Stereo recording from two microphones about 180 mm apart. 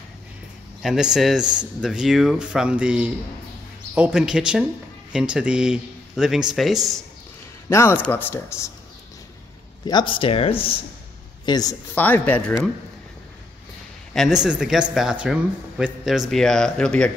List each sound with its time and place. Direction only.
0.8 s speech: 5° right (ahead or behind)
7.7 s speech: 15° left (ahead or behind)
9.8 s speech: 25° left (ahead or behind)
11.9 s speech: 10° left (ahead or behind)
14.1 s speech: centre (ahead or behind)